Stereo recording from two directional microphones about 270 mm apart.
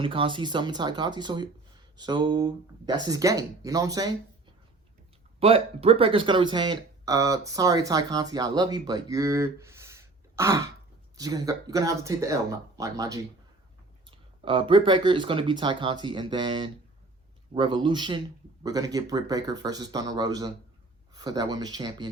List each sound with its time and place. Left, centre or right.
0.0 s speech: centre
5.4 s speech: right